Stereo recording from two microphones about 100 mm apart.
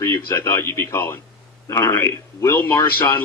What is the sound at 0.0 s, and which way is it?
Speech, 25° left (ahead or behind).